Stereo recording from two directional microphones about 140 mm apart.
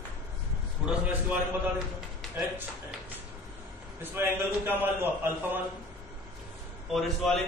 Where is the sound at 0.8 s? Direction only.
10° right (ahead or behind).